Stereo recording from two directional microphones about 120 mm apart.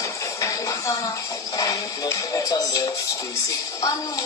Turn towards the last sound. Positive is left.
turn(degrees=30)  # may be behind; listen again after turning